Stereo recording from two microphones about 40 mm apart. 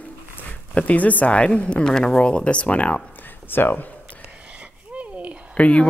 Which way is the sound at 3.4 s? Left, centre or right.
Left.